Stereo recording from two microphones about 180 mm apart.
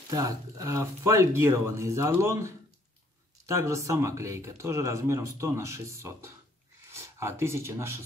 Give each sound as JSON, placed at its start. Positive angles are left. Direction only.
{"t": 0.1, "sound": "speech", "side_deg": -20}